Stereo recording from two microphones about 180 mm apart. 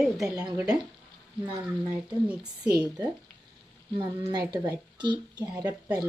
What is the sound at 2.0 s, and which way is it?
Speech, 5° right (ahead or behind).